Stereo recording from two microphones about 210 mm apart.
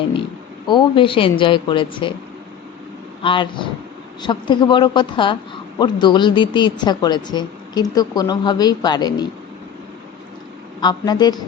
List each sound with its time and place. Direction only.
0.7 s a woman's voice: 25° left (ahead or behind)
3.2 s a woman's voice: 20° left (ahead or behind)
10.8 s a woman's voice: 20° left (ahead or behind)